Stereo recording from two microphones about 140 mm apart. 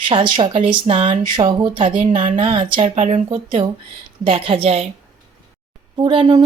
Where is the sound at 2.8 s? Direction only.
55° right (ahead or behind).